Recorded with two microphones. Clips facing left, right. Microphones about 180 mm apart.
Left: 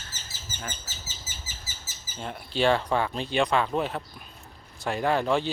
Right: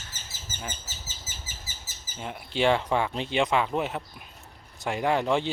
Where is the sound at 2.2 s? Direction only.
15° right (ahead or behind).